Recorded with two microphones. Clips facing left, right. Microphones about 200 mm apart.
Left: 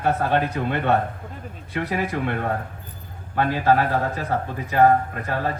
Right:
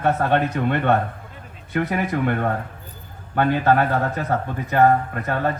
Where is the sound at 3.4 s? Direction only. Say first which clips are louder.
Right 2 dB; 55° right (ahead or behind).